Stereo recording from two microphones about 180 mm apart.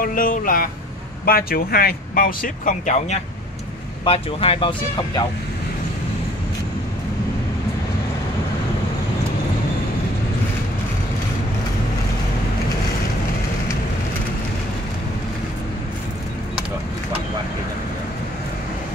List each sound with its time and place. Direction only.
0.0 s speech: 50° left (ahead or behind)
4.0 s speech: 30° left (ahead or behind)